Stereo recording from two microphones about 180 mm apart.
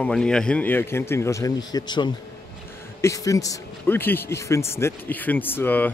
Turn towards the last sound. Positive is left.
turn(degrees=10)  # may be behind; listen again after turning